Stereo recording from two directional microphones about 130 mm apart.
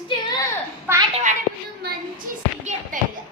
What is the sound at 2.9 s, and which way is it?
Speech, 90° right.